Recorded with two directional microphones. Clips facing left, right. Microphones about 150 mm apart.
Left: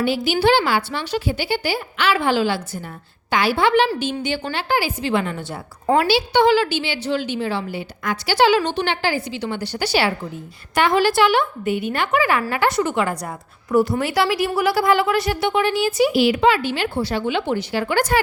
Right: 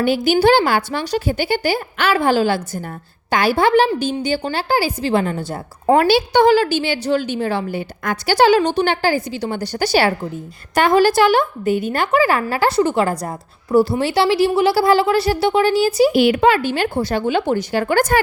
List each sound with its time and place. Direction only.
0.0 s a woman's voice: 50° right (ahead or behind)
5.8 s a woman's voice: 50° right (ahead or behind)
16.1 s a woman's voice: 55° right (ahead or behind)